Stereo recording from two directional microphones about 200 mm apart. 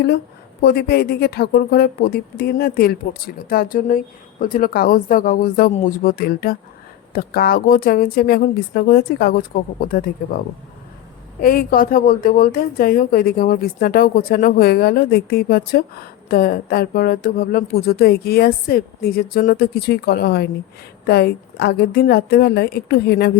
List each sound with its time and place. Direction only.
0.6 s a woman's voice: 55° left (ahead or behind)